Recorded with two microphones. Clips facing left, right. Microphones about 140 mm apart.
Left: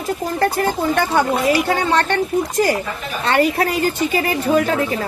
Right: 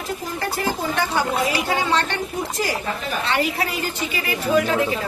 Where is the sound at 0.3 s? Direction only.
50° left (ahead or behind).